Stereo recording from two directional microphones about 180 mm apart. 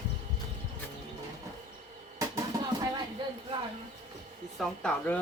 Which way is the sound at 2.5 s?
20° right (ahead or behind).